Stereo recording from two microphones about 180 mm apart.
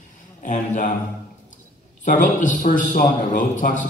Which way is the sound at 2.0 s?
45° left (ahead or behind).